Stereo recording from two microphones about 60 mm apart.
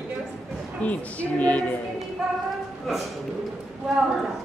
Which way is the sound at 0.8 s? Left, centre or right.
Left.